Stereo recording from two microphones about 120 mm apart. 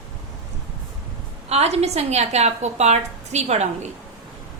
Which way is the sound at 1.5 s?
60° right (ahead or behind).